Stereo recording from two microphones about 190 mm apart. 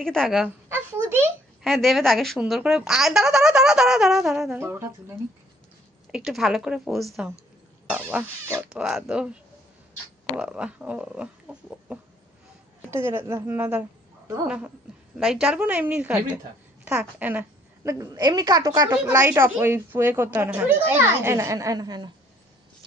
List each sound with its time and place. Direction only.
0.0 s speech: 5° left (ahead or behind)
1.0 s a sound: 10° right (ahead or behind)
1.6 s a woman's voice: centre (ahead or behind)
6.1 s a woman's voice: centre (ahead or behind); by 22.1 s 20° right (ahead or behind)